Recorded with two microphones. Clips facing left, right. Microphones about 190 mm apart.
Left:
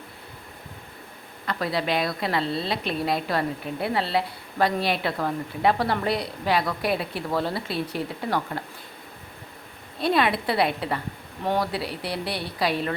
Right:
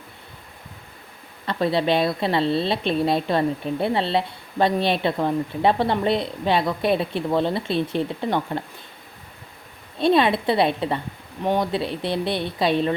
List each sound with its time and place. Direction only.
1.5 s a woman's voice: 25° right (ahead or behind)
10.0 s a woman's voice: 25° right (ahead or behind)